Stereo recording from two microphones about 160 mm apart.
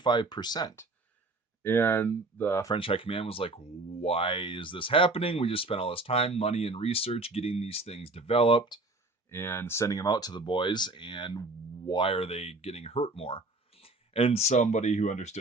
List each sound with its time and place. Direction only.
0.0 s speech: 30° left (ahead or behind)
1.6 s speech: 15° left (ahead or behind)
2.7 s speech: 35° left (ahead or behind)
9.3 s speech: 15° left (ahead or behind); by 15.4 s 45° left (ahead or behind)